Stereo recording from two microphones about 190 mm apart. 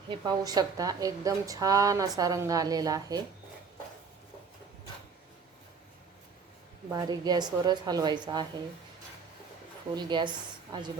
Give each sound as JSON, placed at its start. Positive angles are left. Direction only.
{"t": 0.1, "sound": "speech", "side_deg": -20}
{"t": 6.9, "sound": "speech", "side_deg": -20}
{"t": 9.9, "sound": "speech", "side_deg": -25}